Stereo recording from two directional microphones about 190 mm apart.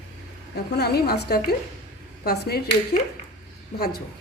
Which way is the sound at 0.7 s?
55° left (ahead or behind).